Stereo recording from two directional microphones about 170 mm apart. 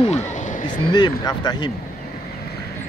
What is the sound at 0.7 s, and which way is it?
Speech, 25° left (ahead or behind).